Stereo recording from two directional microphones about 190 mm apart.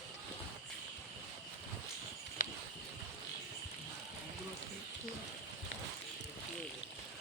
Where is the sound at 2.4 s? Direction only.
45° left (ahead or behind).